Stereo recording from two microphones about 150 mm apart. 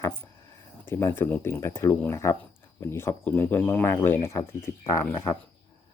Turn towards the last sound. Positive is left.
turn(degrees=15)  # may be behind; listen again after turning